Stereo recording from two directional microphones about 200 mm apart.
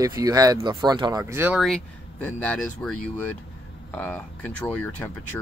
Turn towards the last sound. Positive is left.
turn(degrees=10)  # may be behind; listen again after turning